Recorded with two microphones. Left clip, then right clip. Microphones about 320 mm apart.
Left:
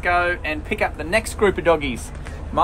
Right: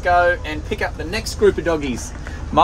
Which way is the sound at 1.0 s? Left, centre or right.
Centre.